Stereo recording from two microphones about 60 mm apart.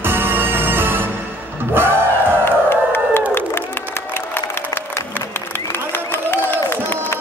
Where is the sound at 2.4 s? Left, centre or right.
Left.